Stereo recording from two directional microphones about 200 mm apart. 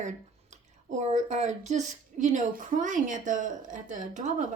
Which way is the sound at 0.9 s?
35° right (ahead or behind).